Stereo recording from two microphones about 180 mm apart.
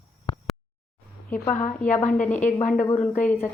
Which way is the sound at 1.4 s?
45° left (ahead or behind).